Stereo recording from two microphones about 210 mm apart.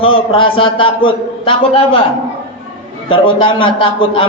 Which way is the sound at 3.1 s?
25° left (ahead or behind).